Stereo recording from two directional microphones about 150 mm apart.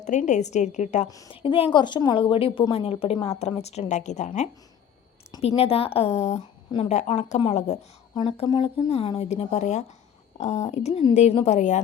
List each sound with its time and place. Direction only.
0.0 s a woman's voice: 55° left (ahead or behind)
1.0 s speech: 25° left (ahead or behind)
1.3 s a woman's voice: 35° left (ahead or behind); by 4.3 s 50° left (ahead or behind)
5.4 s a woman's voice: 45° left (ahead or behind)
8.1 s a woman's voice: 35° left (ahead or behind)
8.9 s a woman's voice: 40° left (ahead or behind)